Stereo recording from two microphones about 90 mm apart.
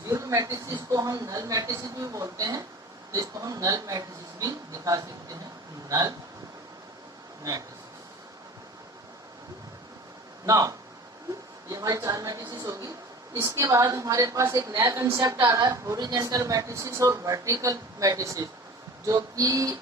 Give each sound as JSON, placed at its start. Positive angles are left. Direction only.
{"t": 0.1, "sound": "a woman's voice", "side_deg": -35}
{"t": 10.4, "sound": "speech", "side_deg": -40}
{"t": 11.7, "sound": "a sound", "side_deg": -40}
{"t": 13.3, "sound": "speech", "side_deg": -30}
{"t": 15.4, "sound": "speech", "side_deg": -40}
{"t": 16.0, "sound": "a woman's voice", "side_deg": -50}
{"t": 16.2, "sound": "speech", "side_deg": -40}